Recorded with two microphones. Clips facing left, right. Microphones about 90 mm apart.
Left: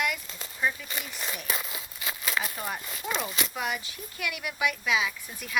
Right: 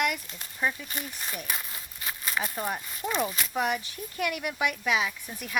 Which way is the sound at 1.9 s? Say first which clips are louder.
Even; 90° left.